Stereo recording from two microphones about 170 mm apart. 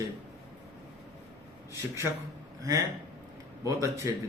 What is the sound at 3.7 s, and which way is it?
Speech, 20° right (ahead or behind).